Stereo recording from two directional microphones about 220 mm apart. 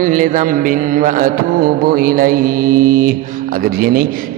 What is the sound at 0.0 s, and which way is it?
A man's voice, 35° right (ahead or behind).